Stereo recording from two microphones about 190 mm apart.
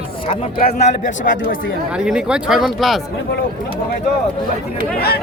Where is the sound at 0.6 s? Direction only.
35° left (ahead or behind).